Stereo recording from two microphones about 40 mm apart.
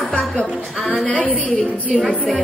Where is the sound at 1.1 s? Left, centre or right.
Left.